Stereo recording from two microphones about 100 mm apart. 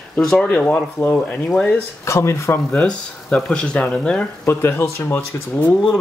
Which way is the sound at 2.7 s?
10° left (ahead or behind).